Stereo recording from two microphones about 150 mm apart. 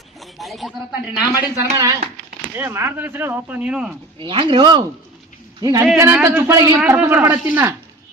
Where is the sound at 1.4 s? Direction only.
20° right (ahead or behind).